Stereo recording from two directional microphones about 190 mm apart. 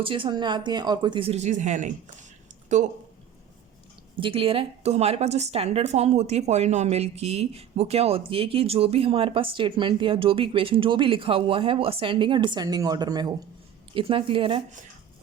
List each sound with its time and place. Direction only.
0.0 s a woman's voice: 25° right (ahead or behind)
4.2 s a woman's voice: 30° right (ahead or behind)